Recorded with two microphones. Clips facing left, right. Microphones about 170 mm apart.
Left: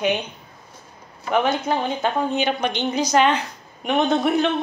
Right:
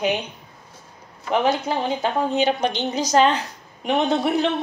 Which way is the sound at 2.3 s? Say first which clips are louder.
Right 2 dB; 40° right (ahead or behind).